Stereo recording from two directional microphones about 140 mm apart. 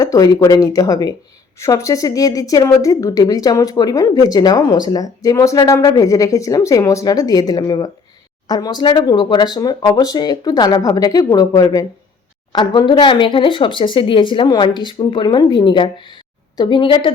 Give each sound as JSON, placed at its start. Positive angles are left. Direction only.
{"t": 0.0, "sound": "a woman's voice", "side_deg": 25}